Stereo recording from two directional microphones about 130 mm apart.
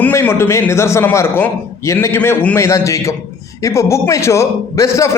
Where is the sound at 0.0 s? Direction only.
15° left (ahead or behind).